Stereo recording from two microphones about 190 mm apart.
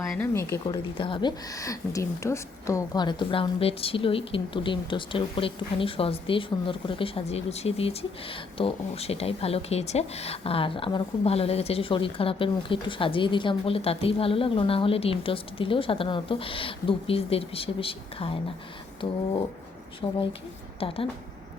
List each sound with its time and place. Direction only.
0.1 s speech: 10° left (ahead or behind)
0.6 s a woman's voice: 25° left (ahead or behind)
20.0 s a woman's voice: 20° left (ahead or behind)
20.7 s a woman's voice: 30° left (ahead or behind)